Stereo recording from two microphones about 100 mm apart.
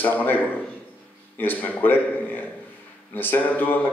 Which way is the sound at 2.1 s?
20° left (ahead or behind).